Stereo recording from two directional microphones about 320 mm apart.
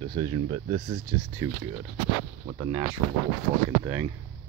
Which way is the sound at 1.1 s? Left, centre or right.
Centre.